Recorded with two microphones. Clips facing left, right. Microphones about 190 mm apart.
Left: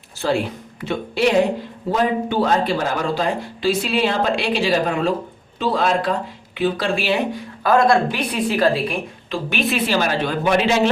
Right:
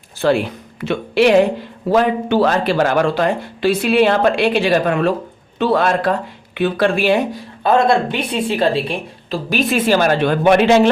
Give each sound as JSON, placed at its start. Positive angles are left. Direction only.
{"t": 0.2, "sound": "speech", "side_deg": -65}
{"t": 7.6, "sound": "a woman's voice", "side_deg": -25}
{"t": 9.3, "sound": "speech", "side_deg": -40}